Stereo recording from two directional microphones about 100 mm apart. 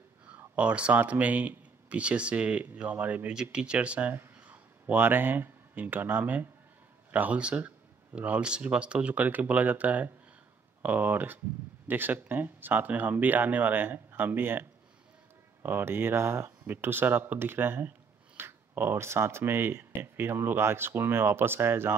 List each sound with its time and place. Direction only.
0.3 s speech: 15° right (ahead or behind)